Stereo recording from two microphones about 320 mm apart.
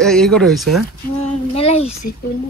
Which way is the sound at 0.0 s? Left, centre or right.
Centre.